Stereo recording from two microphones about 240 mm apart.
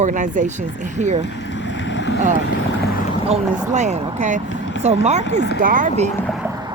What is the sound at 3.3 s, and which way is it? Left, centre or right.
Speech, right.